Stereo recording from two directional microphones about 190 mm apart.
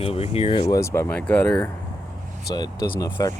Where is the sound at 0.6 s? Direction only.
15° left (ahead or behind).